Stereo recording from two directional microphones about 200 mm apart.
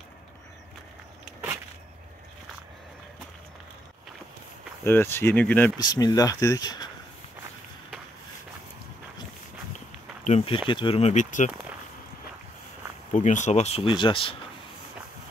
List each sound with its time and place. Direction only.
4.8 s speech: 10° left (ahead or behind)
5.8 s speech: 20° left (ahead or behind)
10.2 s speech: 30° left (ahead or behind)
13.1 s speech: 40° left (ahead or behind)